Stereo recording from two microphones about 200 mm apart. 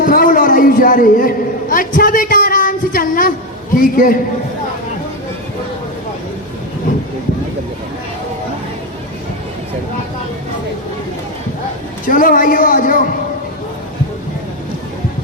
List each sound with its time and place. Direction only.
0.0 s a sound: 45° left (ahead or behind)
3.8 s a man's voice: 45° left (ahead or behind)
12.0 s a man's voice: 40° left (ahead or behind)